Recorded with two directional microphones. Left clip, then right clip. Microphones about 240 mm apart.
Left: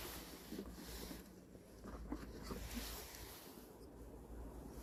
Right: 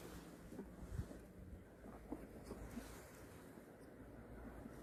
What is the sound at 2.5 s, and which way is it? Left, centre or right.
Boat, left.